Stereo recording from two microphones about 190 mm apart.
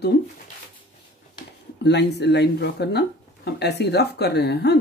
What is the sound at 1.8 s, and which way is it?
Speech, 65° left (ahead or behind).